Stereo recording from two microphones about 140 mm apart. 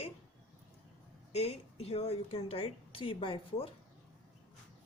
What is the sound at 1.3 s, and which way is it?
A woman's voice, 45° left (ahead or behind).